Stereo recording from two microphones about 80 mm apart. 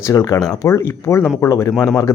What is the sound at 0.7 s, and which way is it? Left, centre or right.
Speech, left.